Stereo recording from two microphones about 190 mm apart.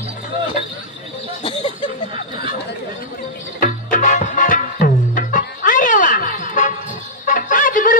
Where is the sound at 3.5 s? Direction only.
45° left (ahead or behind).